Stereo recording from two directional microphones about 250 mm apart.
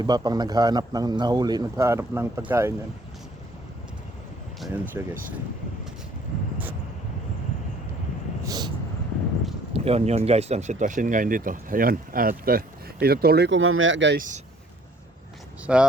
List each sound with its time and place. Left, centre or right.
0.0 s a man's voice: centre
4.6 s a man's voice: centre
8.4 s vehicle: centre
9.7 s speech: right
15.6 s speech: centre